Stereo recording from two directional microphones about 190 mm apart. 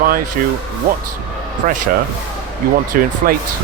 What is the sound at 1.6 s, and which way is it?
Speech, 40° right (ahead or behind).